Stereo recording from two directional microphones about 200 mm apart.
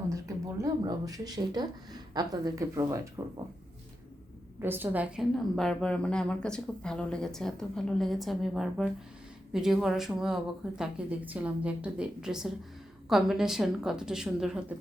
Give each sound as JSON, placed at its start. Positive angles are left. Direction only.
{"t": 0.6, "sound": "speech", "side_deg": -15}
{"t": 4.6, "sound": "a woman's voice", "side_deg": -10}